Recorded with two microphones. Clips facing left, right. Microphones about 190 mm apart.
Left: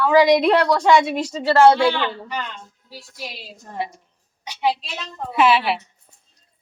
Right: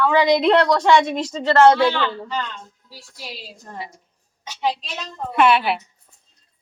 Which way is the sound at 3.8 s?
70° left (ahead or behind).